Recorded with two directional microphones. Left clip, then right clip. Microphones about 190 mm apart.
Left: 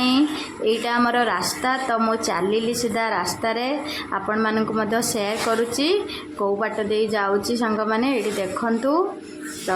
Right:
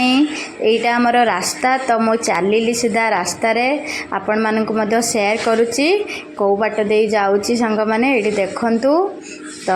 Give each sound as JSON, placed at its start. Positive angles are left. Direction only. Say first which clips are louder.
{"t": 0.9, "sound": "a woman's voice", "louder": "right 5 dB", "side_deg": -15}